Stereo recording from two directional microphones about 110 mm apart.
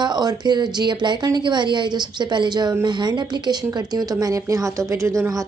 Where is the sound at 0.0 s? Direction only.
40° right (ahead or behind).